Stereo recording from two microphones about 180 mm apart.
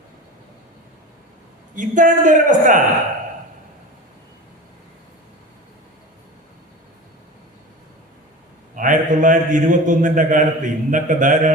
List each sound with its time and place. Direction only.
1.7 s a man's voice: 45° right (ahead or behind)
8.7 s a man's voice: 45° right (ahead or behind)